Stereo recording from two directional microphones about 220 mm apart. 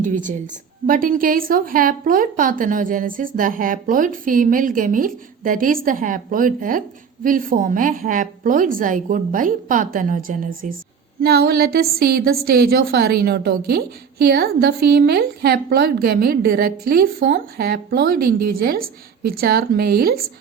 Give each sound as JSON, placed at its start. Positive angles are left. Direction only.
{"t": 0.0, "sound": "a woman's voice", "side_deg": -35}